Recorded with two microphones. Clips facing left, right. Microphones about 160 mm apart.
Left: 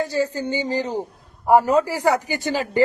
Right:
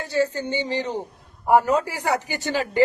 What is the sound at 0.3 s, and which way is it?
Speech, 35° left (ahead or behind).